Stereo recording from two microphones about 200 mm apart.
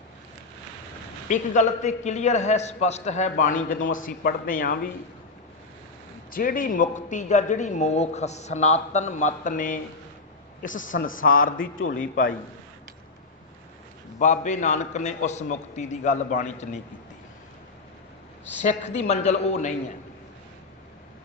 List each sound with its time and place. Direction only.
1.3 s a man's voice: 35° left (ahead or behind)
6.3 s a man's voice: 45° left (ahead or behind)
14.2 s a man's voice: 40° left (ahead or behind)
18.6 s a man's voice: 35° left (ahead or behind)